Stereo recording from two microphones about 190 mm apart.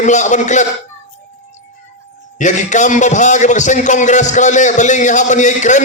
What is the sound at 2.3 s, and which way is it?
A man's voice, 40° left (ahead or behind).